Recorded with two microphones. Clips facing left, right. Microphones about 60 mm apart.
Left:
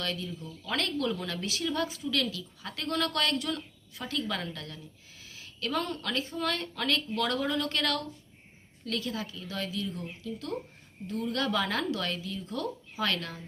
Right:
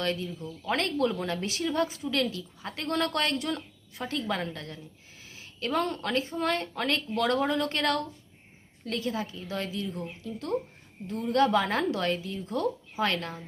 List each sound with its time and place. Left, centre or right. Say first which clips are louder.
0.0 s a woman's voice: right 4 dB; right